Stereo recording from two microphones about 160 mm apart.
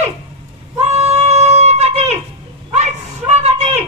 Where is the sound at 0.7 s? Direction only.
40° right (ahead or behind).